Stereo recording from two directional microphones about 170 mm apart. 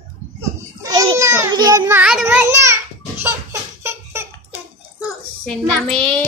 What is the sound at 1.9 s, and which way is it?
Speech, 10° right (ahead or behind).